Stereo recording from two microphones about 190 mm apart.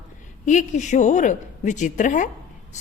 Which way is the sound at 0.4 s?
40° left (ahead or behind).